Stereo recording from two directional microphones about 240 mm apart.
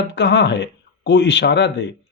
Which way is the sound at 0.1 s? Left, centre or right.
Left.